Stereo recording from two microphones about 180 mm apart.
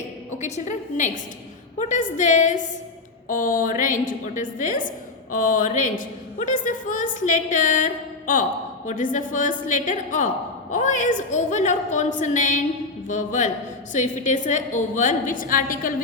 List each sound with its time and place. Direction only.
0.3 s a woman's voice: 40° left (ahead or behind)